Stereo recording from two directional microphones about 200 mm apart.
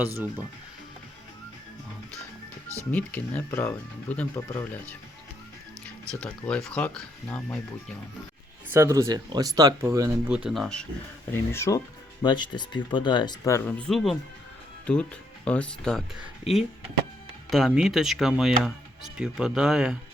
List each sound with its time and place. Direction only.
0.0 s speech: 10° right (ahead or behind)
2.9 s speech: 5° left (ahead or behind)
8.7 s speech: 15° right (ahead or behind)
10.3 s speech: centre (ahead or behind)
11.3 s speech: 15° left (ahead or behind)
17.5 s speech: centre (ahead or behind)